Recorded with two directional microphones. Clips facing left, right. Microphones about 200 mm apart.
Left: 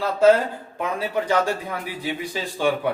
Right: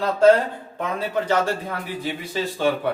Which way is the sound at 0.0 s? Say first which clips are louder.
Right 1 dB; 5° left (ahead or behind).